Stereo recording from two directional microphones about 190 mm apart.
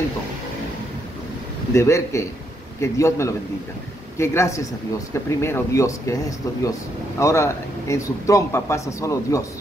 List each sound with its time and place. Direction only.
1.7 s a man's voice: 15° left (ahead or behind)
7.2 s a man's voice: 15° left (ahead or behind)